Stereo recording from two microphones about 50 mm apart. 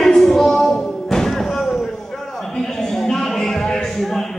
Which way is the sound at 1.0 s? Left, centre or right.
Centre.